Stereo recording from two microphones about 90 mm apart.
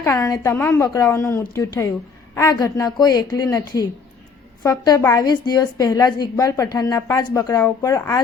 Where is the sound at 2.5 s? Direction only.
40° left (ahead or behind).